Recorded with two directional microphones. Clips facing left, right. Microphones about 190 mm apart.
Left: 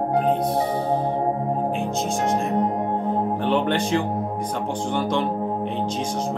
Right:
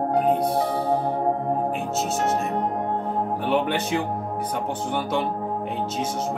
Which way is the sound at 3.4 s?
5° right (ahead or behind).